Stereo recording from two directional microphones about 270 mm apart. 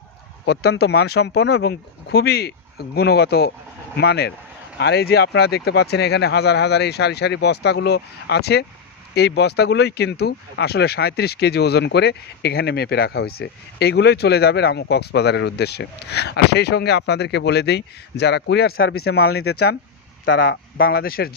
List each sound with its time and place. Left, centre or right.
0.5 s speech: left
19.1 s speech: left